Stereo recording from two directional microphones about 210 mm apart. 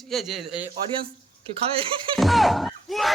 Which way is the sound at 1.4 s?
25° right (ahead or behind).